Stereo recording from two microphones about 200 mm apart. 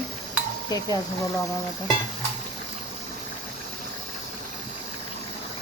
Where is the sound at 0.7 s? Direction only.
20° left (ahead or behind).